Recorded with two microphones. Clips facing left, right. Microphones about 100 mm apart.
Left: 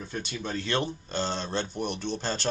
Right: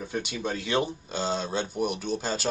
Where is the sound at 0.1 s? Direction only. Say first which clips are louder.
Right 2 dB; 15° right (ahead or behind).